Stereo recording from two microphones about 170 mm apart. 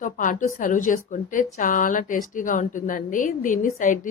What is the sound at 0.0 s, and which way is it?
A woman's voice, 50° left (ahead or behind).